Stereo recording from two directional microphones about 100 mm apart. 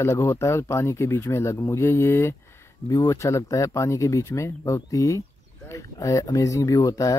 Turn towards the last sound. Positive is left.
turn(degrees=35)  # may be behind; listen again after turning